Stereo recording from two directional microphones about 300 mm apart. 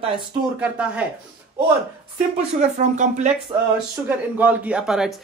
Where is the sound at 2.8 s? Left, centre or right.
Right.